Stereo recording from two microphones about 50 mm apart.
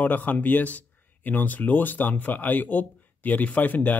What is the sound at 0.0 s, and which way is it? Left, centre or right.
Speech, left.